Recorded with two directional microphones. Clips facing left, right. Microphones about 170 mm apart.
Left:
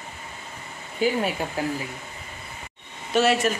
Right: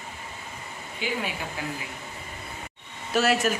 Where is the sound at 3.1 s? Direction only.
Centre (ahead or behind).